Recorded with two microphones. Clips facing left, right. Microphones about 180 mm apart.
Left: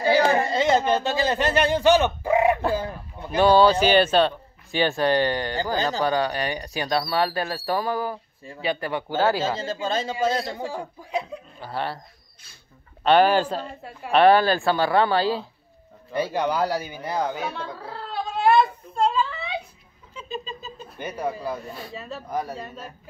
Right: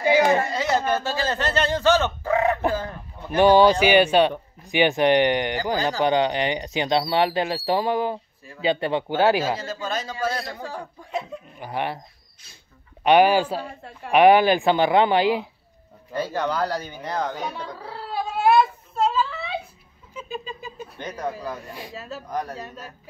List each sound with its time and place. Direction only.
0.0 s a sound: 15° right (ahead or behind)
0.5 s a sound: 25° left (ahead or behind)
3.3 s speech: 15° right (ahead or behind)
9.6 s speech: 25° left (ahead or behind)
10.6 s speech: 10° left (ahead or behind)
11.6 s speech: 15° right (ahead or behind)
13.0 s speech: 15° right (ahead or behind)
16.1 s speech: 15° left (ahead or behind)
18.0 s whimper: 5° right (ahead or behind)
20.2 s a sound: 10° right (ahead or behind)
21.0 s speech: 5° left (ahead or behind)
22.3 s speech: 10° left (ahead or behind)